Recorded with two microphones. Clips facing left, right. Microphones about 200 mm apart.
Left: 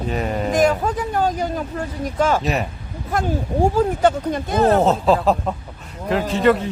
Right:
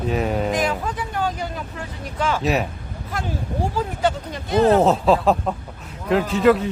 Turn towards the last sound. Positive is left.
turn(degrees=0)  # may be behind; listen again after turning